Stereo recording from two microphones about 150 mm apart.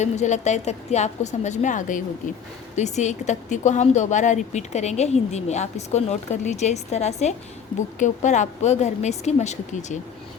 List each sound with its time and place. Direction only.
0.0 s a woman's voice: 50° left (ahead or behind)